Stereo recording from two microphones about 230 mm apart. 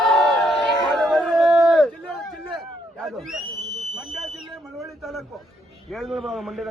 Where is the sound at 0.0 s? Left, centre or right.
Centre.